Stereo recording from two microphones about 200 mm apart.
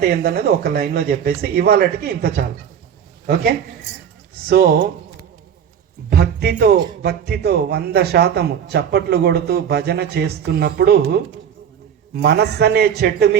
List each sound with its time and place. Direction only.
0.1 s speech: 50° right (ahead or behind)
6.1 s a man's voice: 55° right (ahead or behind)